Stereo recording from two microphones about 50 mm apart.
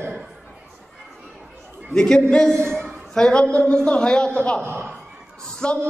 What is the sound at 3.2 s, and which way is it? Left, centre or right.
A man's voice, centre.